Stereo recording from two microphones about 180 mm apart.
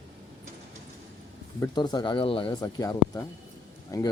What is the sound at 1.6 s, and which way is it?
Speech, 25° left (ahead or behind).